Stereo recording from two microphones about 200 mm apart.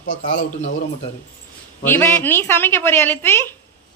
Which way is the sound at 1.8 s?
10° left (ahead or behind).